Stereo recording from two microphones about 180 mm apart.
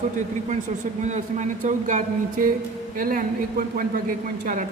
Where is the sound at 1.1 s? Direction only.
40° right (ahead or behind).